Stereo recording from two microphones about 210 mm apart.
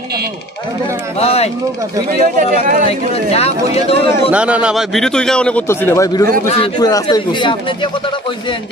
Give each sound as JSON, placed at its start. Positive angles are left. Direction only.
{"t": 1.1, "sound": "speech", "side_deg": 30}
{"t": 2.0, "sound": "speech", "side_deg": -40}
{"t": 2.9, "sound": "speech", "side_deg": 30}
{"t": 4.3, "sound": "a man's voice", "side_deg": -5}